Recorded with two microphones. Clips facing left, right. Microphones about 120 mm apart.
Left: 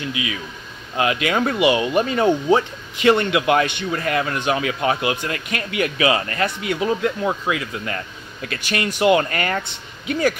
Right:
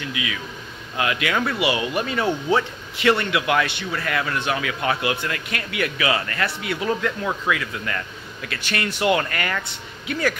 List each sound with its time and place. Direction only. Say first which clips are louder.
0.1 s speech: left 2 dB; 30° left (ahead or behind)
8.5 s speech: left 3 dB; 15° left (ahead or behind)